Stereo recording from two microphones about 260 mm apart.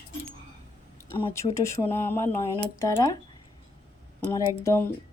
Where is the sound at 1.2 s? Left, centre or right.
Centre.